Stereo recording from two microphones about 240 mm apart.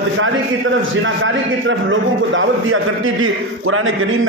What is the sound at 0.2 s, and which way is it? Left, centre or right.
A man's voice, right.